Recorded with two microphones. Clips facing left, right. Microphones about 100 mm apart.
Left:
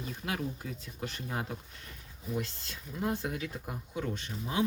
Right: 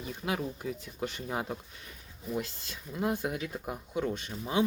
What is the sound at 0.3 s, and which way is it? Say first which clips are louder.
Speech: right 3 dB; 15° right (ahead or behind).